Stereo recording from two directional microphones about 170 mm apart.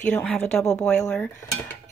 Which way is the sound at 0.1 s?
5° left (ahead or behind).